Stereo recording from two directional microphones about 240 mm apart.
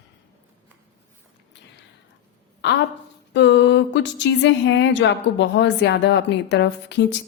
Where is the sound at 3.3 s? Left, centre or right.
Left.